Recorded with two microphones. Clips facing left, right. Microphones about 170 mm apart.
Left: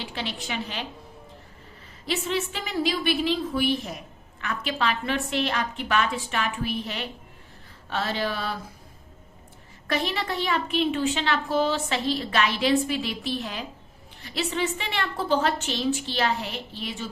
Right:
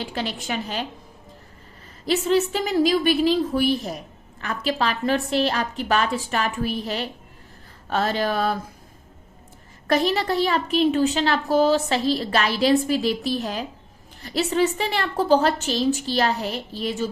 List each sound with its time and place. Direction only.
0.0 s a woman's voice: 45° right (ahead or behind)
2.0 s a woman's voice: 40° right (ahead or behind)
9.8 s a woman's voice: 40° right (ahead or behind)